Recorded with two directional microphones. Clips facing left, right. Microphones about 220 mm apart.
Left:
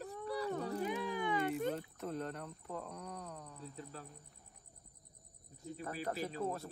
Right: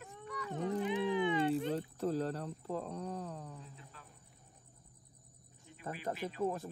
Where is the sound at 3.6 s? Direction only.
40° left (ahead or behind).